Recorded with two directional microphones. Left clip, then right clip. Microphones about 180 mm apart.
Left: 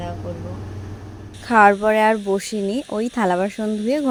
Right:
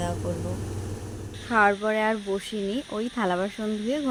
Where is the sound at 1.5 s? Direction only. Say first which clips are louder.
Left 8 dB; 40° left (ahead or behind).